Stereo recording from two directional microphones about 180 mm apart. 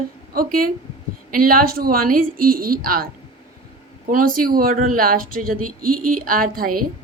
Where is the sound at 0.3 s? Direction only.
55° right (ahead or behind).